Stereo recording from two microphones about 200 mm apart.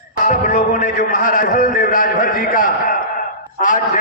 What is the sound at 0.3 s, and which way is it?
A man's voice, 40° left (ahead or behind).